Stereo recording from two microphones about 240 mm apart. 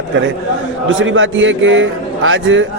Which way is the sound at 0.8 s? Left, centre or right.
Right.